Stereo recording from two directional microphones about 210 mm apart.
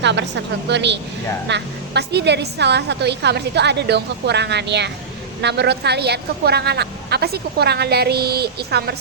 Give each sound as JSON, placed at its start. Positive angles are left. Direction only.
{"t": 0.0, "sound": "a woman's voice", "side_deg": -55}